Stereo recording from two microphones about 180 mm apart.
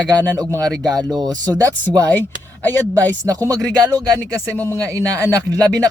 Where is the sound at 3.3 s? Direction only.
20° right (ahead or behind).